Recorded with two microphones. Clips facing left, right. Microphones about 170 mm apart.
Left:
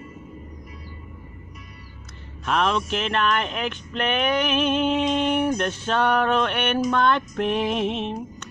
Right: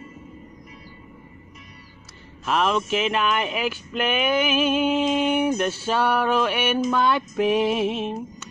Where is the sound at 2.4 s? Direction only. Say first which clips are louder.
Right 1 dB; 5° right (ahead or behind).